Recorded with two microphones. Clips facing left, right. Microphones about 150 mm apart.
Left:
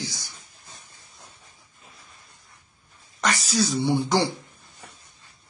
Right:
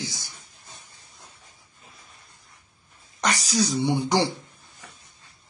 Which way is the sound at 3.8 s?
15° right (ahead or behind).